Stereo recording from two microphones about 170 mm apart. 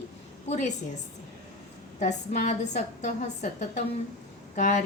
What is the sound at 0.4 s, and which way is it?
Speech, 40° left (ahead or behind).